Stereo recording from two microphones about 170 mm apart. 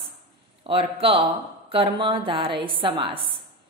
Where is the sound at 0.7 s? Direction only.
30° right (ahead or behind).